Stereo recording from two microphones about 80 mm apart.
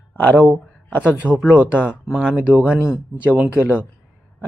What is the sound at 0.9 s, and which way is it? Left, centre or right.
Speech, left.